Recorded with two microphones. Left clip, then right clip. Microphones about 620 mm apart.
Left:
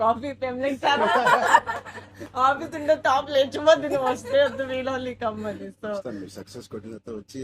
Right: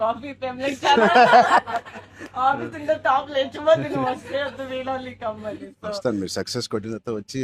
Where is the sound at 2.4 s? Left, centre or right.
Centre.